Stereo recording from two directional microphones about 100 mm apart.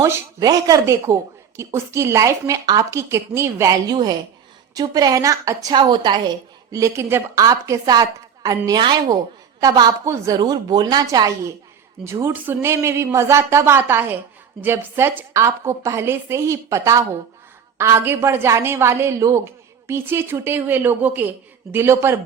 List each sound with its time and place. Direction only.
0.0 s a woman's voice: 35° right (ahead or behind)
3.8 s a woman's voice: 45° right (ahead or behind)
5.7 s a woman's voice: 50° right (ahead or behind); by 22.2 s 25° right (ahead or behind)